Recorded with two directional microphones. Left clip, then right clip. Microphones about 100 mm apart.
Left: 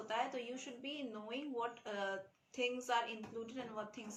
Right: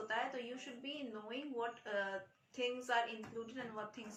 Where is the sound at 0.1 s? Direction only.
40° left (ahead or behind).